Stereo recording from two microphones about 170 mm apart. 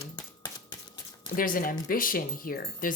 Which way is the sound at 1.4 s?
55° left (ahead or behind).